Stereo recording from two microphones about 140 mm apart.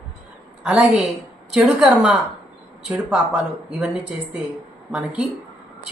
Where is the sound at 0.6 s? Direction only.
5° right (ahead or behind).